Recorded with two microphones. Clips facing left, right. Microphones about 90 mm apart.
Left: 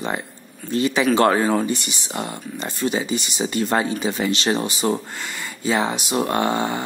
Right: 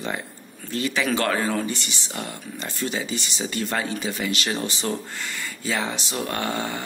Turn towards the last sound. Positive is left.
turn(degrees=20)  # may be behind; listen again after turning